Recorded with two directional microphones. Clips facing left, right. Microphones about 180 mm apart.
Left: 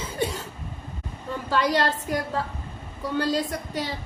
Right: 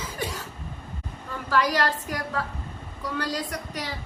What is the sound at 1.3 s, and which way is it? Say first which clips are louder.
A woman's voice: left 1 dB; 25° left (ahead or behind).